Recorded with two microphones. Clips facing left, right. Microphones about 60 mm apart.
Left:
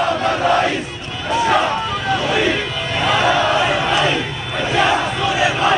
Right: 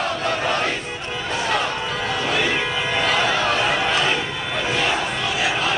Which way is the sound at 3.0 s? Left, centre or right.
Left.